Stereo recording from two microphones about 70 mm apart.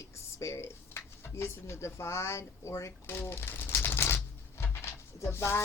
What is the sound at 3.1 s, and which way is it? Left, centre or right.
Pigeon, left.